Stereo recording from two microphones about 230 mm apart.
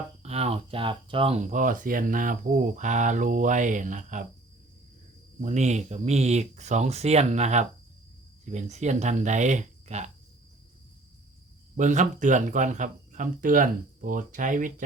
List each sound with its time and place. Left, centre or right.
0.2 s speech: right
5.4 s speech: right
11.8 s speech: right